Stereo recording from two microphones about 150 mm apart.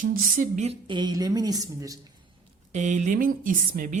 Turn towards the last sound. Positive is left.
turn(degrees=-65)  # may be behind; listen again after turning